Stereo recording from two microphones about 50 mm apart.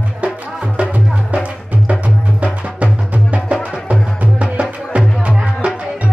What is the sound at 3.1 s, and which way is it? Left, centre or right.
Music, right.